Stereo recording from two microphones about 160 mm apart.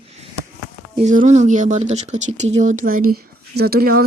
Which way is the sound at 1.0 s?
45° right (ahead or behind).